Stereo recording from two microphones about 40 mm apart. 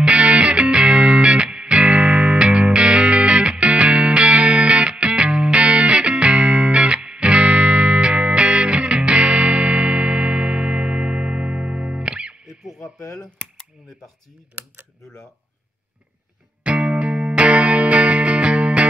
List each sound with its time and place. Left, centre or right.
0.0 s music: right
14.6 s computer keyboard: right
16.6 s music: right